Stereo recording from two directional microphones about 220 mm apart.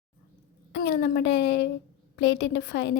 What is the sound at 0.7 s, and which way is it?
A woman's voice, 50° left (ahead or behind).